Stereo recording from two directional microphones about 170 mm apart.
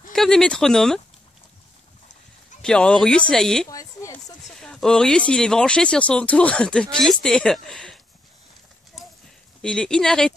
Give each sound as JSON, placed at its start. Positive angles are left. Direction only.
{"t": 0.1, "sound": "speech", "side_deg": 5}
{"t": 2.6, "sound": "speech", "side_deg": 5}
{"t": 3.6, "sound": "a woman's voice", "side_deg": 20}
{"t": 4.5, "sound": "speech", "side_deg": 0}
{"t": 9.6, "sound": "speech", "side_deg": 5}